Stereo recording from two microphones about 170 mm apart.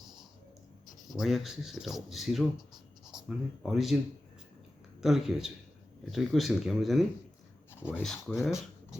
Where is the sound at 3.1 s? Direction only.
5° right (ahead or behind).